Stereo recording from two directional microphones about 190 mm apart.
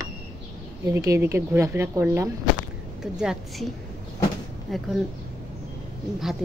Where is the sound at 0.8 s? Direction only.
15° right (ahead or behind).